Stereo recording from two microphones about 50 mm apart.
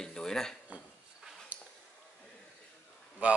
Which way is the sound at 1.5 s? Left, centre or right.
Right.